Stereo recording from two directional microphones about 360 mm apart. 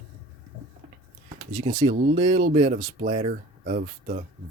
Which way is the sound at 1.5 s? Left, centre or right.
Centre.